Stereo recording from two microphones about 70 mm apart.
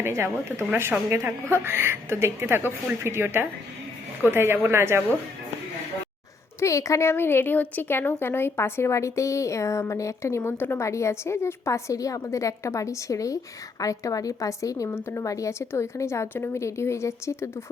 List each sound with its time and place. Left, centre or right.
0.0 s a woman's voice: right
6.6 s a woman's voice: left